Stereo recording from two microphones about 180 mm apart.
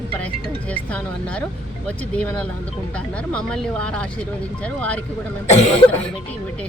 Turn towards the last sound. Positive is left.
turn(degrees=35)  # may be behind; listen again after turning